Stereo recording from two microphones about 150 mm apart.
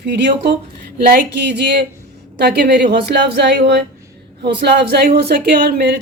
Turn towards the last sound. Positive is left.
turn(degrees=-90)